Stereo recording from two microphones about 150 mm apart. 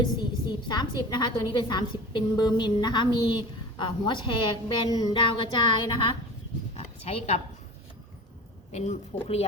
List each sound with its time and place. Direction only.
0.0 s a woman's voice: 30° left (ahead or behind)
6.7 s a sound: 45° left (ahead or behind)
9.2 s speech: 45° left (ahead or behind)